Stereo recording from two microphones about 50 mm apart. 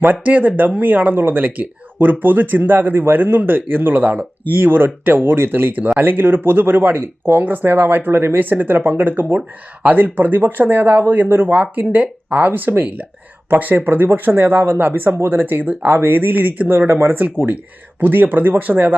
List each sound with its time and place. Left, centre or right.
0.0 s speech: right
4.5 s speech: right
15.1 s speech: right